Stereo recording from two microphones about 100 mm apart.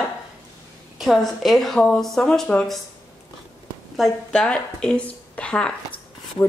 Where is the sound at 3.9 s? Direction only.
Centre (ahead or behind).